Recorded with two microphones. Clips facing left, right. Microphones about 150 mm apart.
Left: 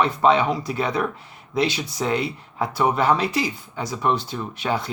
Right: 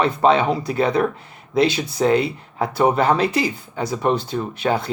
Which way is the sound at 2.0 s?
45° right (ahead or behind).